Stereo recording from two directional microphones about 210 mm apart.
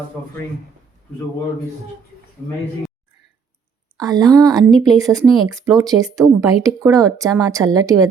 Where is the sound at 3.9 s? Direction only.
20° right (ahead or behind).